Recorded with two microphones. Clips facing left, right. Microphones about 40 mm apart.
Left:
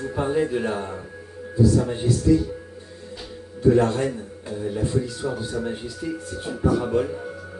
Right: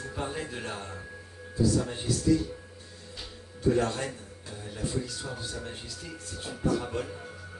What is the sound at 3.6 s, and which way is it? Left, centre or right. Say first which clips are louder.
A man's voice: left 8 dB; centre.